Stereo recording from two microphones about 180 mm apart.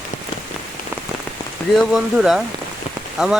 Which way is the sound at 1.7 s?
Centre (ahead or behind).